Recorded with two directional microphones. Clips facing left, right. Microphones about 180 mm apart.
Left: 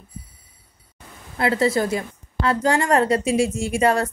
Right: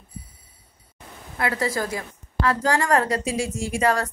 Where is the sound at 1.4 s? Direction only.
25° left (ahead or behind).